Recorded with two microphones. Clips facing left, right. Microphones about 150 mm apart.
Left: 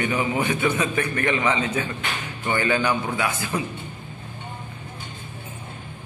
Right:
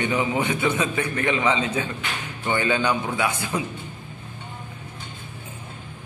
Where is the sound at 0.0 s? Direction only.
20° right (ahead or behind).